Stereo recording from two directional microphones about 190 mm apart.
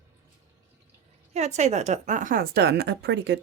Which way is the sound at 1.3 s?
35° right (ahead or behind).